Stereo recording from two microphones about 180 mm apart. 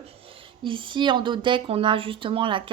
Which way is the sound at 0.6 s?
25° right (ahead or behind).